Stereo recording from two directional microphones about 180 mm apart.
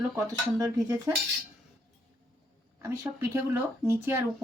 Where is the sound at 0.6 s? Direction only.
15° right (ahead or behind).